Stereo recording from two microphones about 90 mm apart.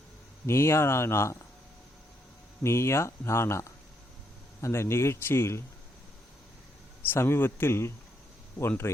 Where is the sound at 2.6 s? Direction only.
30° left (ahead or behind).